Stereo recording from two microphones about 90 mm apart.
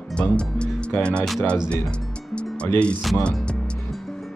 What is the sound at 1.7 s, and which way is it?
Music, 10° left (ahead or behind).